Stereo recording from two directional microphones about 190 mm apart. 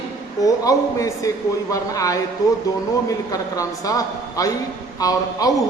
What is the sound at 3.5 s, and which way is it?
A man's voice, 20° left (ahead or behind).